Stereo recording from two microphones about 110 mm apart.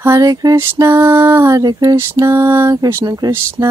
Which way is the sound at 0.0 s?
30° right (ahead or behind).